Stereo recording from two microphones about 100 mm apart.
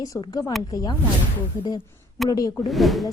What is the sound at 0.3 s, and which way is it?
Speech, 35° left (ahead or behind).